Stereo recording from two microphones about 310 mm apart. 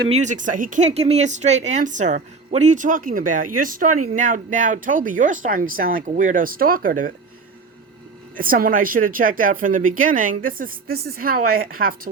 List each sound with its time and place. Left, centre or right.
0.0 s speech: right
8.4 s speech: right